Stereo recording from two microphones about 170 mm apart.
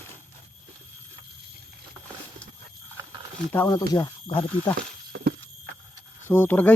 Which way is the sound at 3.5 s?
15° left (ahead or behind).